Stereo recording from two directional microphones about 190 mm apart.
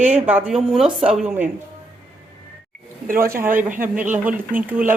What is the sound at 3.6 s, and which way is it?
Speech, 45° right (ahead or behind).